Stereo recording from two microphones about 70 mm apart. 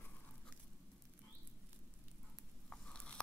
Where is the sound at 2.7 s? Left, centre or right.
Centre.